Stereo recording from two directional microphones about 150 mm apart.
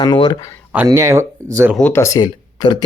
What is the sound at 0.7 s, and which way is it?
Speech, 15° right (ahead or behind).